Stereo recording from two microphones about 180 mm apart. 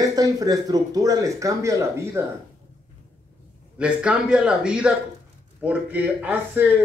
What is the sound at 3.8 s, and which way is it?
Speech, 5° right (ahead or behind).